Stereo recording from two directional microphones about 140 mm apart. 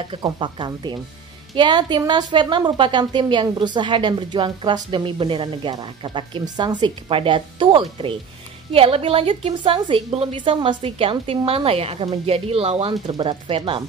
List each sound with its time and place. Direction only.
0.1 s a woman's voice: 35° right (ahead or behind)